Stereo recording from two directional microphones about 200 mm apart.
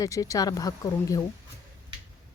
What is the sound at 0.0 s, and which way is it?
Speech, 15° left (ahead or behind).